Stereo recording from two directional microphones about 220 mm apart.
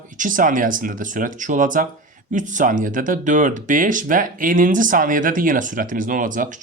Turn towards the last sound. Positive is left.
turn(degrees=-35)  # may be behind; listen again after turning